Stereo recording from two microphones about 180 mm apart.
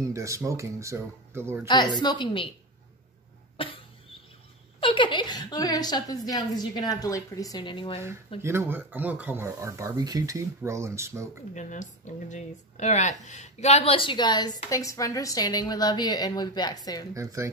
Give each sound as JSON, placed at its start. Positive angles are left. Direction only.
{"t": 0.0, "sound": "speech", "side_deg": -15}
{"t": 1.7, "sound": "speech", "side_deg": 25}
{"t": 3.5, "sound": "cough", "side_deg": 30}
{"t": 4.7, "sound": "speech", "side_deg": 30}
{"t": 8.4, "sound": "speech", "side_deg": -15}
{"t": 11.5, "sound": "speech", "side_deg": 40}
{"t": 17.1, "sound": "speech", "side_deg": -15}